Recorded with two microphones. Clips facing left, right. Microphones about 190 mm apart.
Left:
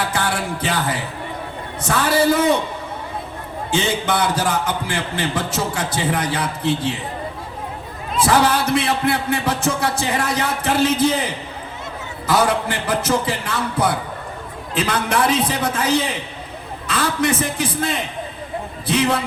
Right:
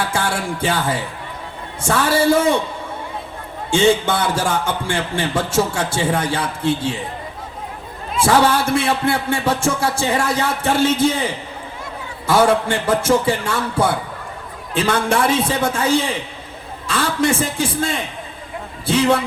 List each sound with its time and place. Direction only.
0.0 s music: 25° right (ahead or behind)
1.8 s a man's voice: 25° right (ahead or behind)
3.7 s a man's voice: 25° right (ahead or behind)
8.2 s a man's voice: 25° right (ahead or behind)
12.3 s a man's voice: 25° right (ahead or behind)